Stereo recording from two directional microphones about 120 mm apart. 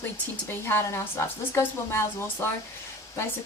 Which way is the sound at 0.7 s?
20° left (ahead or behind).